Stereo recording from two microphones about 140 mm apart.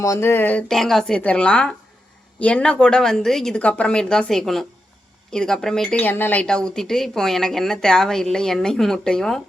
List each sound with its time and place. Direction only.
0.0 s speech: 20° left (ahead or behind)
0.7 s speech: centre (ahead or behind)